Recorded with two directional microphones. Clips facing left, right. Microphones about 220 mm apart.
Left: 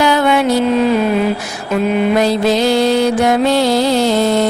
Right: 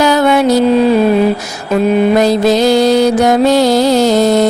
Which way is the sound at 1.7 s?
45° right (ahead or behind).